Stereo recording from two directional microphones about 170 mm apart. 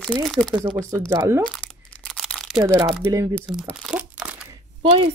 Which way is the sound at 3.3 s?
Centre (ahead or behind).